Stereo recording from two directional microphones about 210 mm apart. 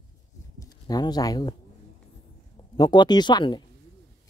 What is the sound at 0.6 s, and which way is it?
Speech, 20° left (ahead or behind).